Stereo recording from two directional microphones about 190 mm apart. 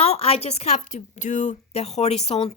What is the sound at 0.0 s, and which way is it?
A woman's voice, 30° left (ahead or behind).